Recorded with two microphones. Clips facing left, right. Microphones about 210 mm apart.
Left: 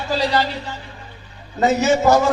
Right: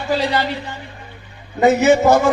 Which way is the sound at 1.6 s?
55° right (ahead or behind).